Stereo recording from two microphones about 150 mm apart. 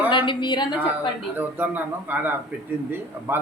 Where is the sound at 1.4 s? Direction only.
10° right (ahead or behind).